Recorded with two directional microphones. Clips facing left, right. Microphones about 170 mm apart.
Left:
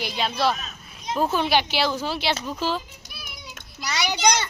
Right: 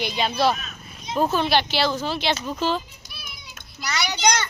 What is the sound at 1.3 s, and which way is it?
A woman's voice, 10° left (ahead or behind).